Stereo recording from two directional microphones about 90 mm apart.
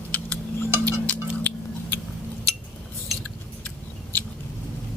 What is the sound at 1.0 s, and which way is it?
Music, 20° left (ahead or behind).